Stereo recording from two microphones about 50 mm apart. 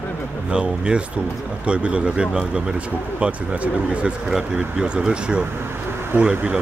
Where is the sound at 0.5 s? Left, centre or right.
Centre.